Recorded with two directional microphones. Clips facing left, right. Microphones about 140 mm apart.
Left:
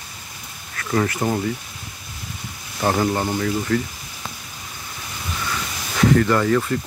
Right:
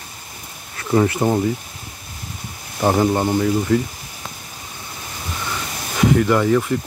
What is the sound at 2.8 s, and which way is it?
Speech, 15° right (ahead or behind).